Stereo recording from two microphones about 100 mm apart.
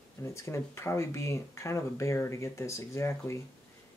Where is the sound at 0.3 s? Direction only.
30° left (ahead or behind).